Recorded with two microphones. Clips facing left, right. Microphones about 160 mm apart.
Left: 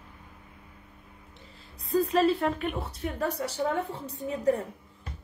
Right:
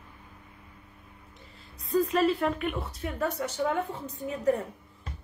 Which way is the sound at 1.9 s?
35° left (ahead or behind).